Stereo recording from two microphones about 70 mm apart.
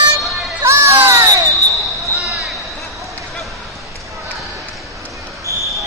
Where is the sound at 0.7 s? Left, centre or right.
Right.